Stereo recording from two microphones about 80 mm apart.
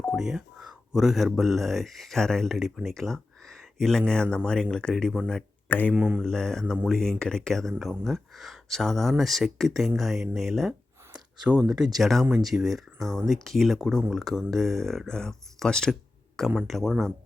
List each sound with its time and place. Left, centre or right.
0.0 s speech: centre
5.6 s speech: left
5.9 s speech: centre
6.2 s speech: centre